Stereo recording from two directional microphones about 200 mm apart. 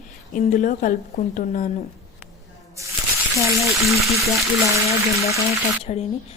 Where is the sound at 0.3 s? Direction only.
40° left (ahead or behind).